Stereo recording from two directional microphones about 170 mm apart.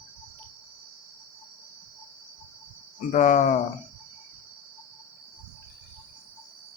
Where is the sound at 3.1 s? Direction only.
45° left (ahead or behind).